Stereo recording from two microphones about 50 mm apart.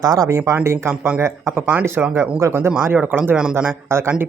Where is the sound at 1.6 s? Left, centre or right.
Right.